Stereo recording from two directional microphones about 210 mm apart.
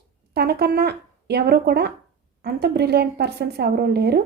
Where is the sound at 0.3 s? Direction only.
50° right (ahead or behind).